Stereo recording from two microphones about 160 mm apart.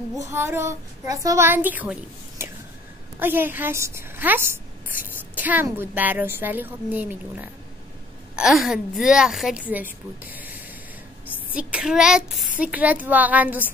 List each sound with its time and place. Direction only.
0.3 s a child's voice: 15° right (ahead or behind)
10.2 s a sound: 10° right (ahead or behind)
11.5 s a woman's voice: 5° right (ahead or behind)